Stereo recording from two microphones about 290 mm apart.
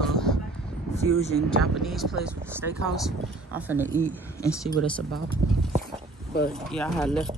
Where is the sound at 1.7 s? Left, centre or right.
Centre.